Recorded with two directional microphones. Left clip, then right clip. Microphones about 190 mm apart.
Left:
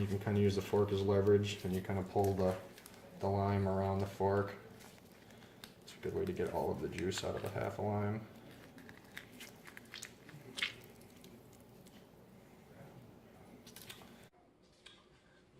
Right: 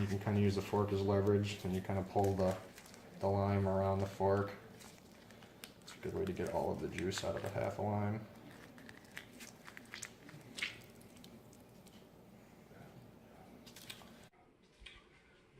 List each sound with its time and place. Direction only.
0.0 s speech: centre (ahead or behind)
5.9 s speech: centre (ahead or behind)
9.1 s walk: centre (ahead or behind)